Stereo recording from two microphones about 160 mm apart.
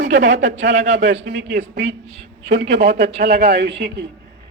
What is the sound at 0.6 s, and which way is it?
A man's voice, 90° right.